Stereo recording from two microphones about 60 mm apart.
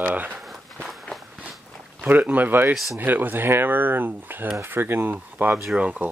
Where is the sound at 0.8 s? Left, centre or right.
Centre.